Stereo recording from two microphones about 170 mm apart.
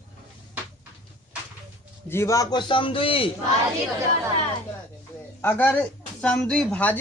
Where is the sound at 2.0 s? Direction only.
15° left (ahead or behind); by 3.3 s 30° left (ahead or behind).